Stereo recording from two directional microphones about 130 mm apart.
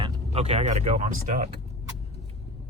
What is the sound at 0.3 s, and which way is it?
Speech, 55° right (ahead or behind).